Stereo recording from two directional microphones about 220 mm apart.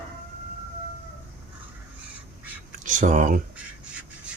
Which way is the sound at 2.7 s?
35° right (ahead or behind).